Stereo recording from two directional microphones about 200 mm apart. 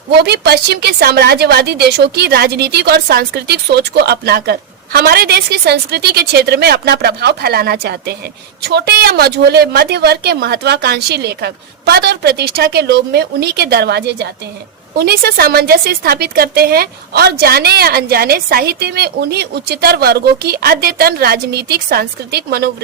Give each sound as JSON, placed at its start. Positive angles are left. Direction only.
{"t": 0.1, "sound": "a woman's voice", "side_deg": -55}